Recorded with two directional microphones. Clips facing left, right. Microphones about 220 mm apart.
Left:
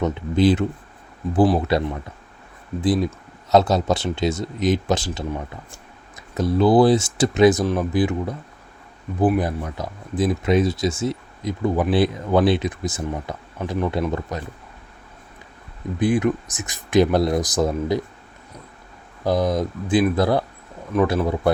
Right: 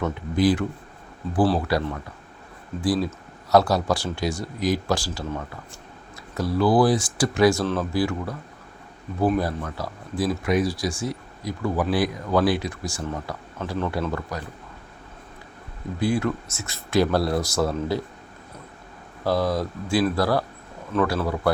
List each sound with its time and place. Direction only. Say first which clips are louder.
0.0 s speech: left 3 dB; 25° left (ahead or behind)
16.0 s speech: left 4 dB; 20° left (ahead or behind)
19.2 s speech: left 3 dB; 20° left (ahead or behind)